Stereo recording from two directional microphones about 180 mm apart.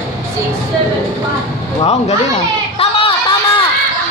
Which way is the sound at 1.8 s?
35° left (ahead or behind).